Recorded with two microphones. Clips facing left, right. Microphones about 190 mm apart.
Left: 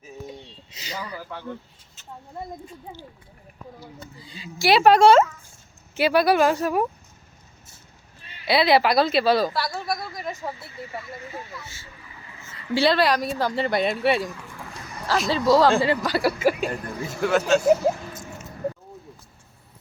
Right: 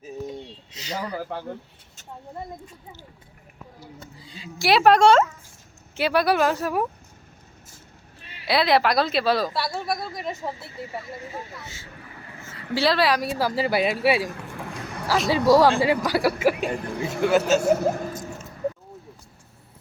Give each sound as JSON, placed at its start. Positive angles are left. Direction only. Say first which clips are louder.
{"t": 0.3, "sound": "a sound", "louder": "right 4 dB", "side_deg": 5}
{"t": 0.9, "sound": "speech", "louder": "right 5 dB", "side_deg": -45}
{"t": 4.2, "sound": "speech", "louder": "left 2 dB", "side_deg": 0}
{"t": 8.4, "sound": "speech", "louder": "left 1 dB", "side_deg": 0}
{"t": 9.5, "sound": "speech", "louder": "even", "side_deg": -25}
{"t": 11.2, "sound": "speech", "louder": "right 1 dB", "side_deg": -35}
{"t": 11.9, "sound": "a sound", "louder": "right 3 dB", "side_deg": -55}
{"t": 12.7, "sound": "speech", "louder": "left 1 dB", "side_deg": 0}
{"t": 14.3, "sound": "a sound", "louder": "right 3 dB", "side_deg": -65}
{"t": 15.0, "sound": "speech", "louder": "right 1 dB", "side_deg": -5}
{"t": 17.6, "sound": "speech", "louder": "left 2 dB", "side_deg": -55}